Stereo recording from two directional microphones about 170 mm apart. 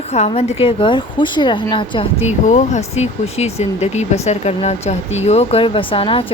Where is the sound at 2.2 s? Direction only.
45° left (ahead or behind).